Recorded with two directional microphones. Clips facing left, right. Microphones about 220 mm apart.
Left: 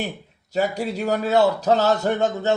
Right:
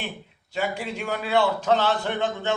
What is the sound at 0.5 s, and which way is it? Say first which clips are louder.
Speech: left 5 dB; 40° left (ahead or behind).